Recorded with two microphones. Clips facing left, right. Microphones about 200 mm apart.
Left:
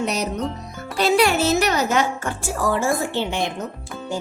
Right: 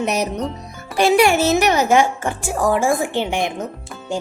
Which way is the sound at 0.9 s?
10° right (ahead or behind).